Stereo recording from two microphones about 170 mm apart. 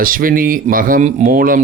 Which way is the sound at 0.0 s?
55° right (ahead or behind).